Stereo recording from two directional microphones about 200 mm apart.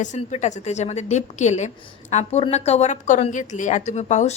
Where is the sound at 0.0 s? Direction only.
35° left (ahead or behind).